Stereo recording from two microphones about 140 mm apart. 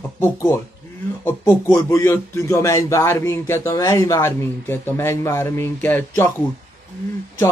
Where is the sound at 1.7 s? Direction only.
20° left (ahead or behind).